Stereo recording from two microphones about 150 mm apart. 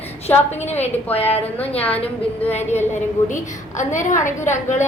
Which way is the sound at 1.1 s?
40° left (ahead or behind).